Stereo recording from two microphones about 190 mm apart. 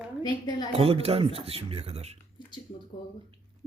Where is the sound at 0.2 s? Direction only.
20° left (ahead or behind).